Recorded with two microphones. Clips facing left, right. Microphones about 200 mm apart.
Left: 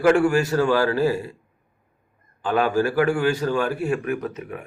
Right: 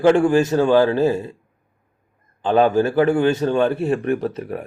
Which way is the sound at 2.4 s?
25° right (ahead or behind).